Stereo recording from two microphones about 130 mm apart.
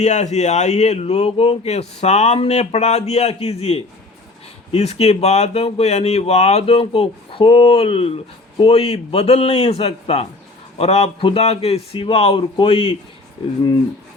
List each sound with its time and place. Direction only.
0.0 s speech: 65° left (ahead or behind); by 13.0 s 45° left (ahead or behind)